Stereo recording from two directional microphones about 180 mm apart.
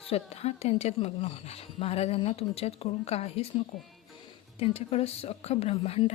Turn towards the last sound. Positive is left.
turn(degrees=35)  # may be behind; listen again after turning